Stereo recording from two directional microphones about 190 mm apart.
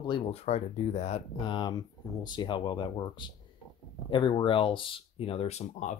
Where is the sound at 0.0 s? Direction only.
30° left (ahead or behind).